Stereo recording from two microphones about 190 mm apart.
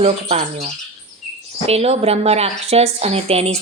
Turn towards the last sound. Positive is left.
turn(degrees=-30)  # may be behind; listen again after turning